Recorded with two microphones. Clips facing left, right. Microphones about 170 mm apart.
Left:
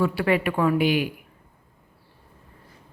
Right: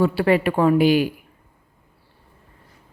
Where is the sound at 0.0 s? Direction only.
30° right (ahead or behind).